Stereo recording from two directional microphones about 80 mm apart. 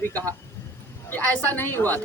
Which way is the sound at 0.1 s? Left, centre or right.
Centre.